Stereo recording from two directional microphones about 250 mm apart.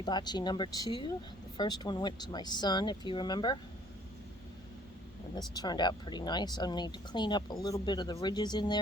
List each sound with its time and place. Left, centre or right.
0.0 s speech: centre
5.5 s speech: centre